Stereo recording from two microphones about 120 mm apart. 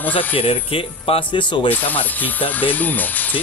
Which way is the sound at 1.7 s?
15° left (ahead or behind).